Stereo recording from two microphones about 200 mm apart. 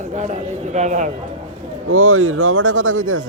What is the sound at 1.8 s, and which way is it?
A man's voice, 90° right.